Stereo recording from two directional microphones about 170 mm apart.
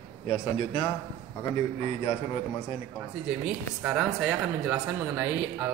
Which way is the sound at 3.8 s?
5° right (ahead or behind).